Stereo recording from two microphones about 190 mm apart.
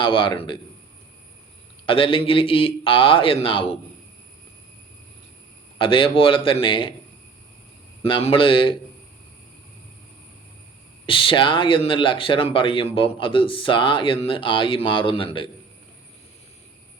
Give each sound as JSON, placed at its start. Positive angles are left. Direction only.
{"t": 0.0, "sound": "speech", "side_deg": 25}
{"t": 1.9, "sound": "speech", "side_deg": 25}
{"t": 5.7, "sound": "speech", "side_deg": 25}
{"t": 8.0, "sound": "speech", "side_deg": 25}
{"t": 11.0, "sound": "speech", "side_deg": 25}